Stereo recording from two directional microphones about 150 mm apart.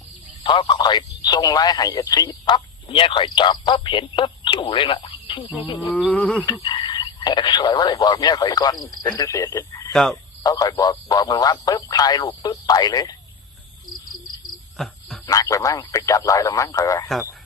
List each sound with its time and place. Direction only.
0.4 s speech: 30° left (ahead or behind)
6.1 s wild animals: 10° left (ahead or behind)
6.4 s speech: 30° left (ahead or behind)
9.9 s frog: 5° left (ahead or behind)
10.4 s speech: 25° left (ahead or behind)
14.8 s frog: 5° left (ahead or behind)
15.3 s speech: 20° left (ahead or behind)